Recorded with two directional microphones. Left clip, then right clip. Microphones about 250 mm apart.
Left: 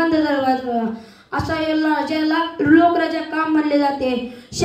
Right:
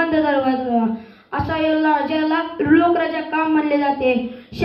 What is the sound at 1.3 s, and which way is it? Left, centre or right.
A woman's voice, left.